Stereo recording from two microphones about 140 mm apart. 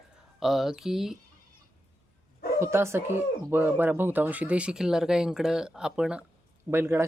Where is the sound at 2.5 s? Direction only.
20° right (ahead or behind).